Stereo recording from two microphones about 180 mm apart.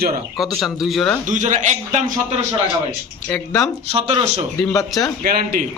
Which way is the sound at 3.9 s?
35° right (ahead or behind).